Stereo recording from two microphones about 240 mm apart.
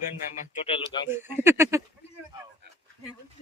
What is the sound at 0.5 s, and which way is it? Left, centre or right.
Speech, left.